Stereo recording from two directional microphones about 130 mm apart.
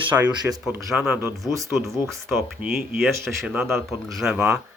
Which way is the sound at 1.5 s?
25° right (ahead or behind).